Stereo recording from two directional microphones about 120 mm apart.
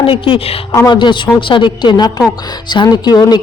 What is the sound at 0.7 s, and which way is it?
Speech, 35° left (ahead or behind).